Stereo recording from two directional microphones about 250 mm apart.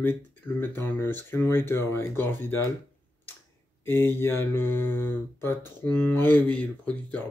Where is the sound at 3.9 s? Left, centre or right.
Centre.